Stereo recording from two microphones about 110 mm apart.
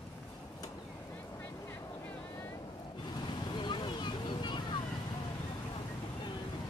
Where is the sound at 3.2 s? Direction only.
45° left (ahead or behind).